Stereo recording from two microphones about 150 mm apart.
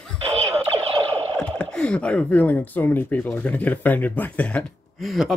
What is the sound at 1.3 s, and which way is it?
Speech, 5° left (ahead or behind).